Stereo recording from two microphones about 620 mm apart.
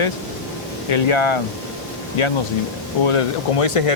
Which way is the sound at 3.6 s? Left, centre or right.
Left.